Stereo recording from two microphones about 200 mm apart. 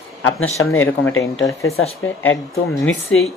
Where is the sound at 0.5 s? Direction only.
15° left (ahead or behind).